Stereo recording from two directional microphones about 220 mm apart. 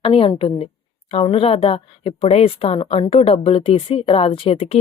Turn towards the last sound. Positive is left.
turn(degrees=25)  # may be behind; listen again after turning